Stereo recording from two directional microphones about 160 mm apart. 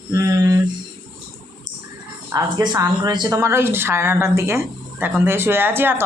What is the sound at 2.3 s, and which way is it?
Speech, 20° right (ahead or behind).